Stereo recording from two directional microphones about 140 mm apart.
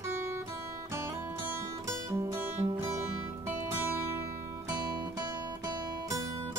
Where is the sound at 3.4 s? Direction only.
15° right (ahead or behind).